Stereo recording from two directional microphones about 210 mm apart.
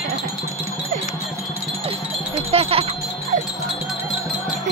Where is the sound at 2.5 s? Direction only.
30° right (ahead or behind).